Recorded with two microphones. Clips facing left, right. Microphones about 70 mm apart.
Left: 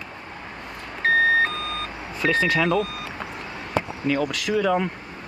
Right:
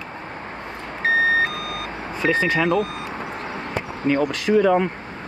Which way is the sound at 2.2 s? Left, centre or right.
Right.